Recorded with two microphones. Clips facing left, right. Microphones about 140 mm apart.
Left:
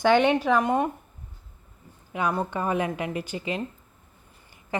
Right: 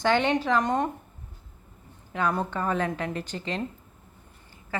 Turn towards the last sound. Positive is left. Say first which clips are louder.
# left 3 dB
turn(degrees=20)  # may be behind; listen again after turning